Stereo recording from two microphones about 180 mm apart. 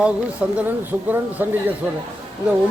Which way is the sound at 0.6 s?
10° right (ahead or behind).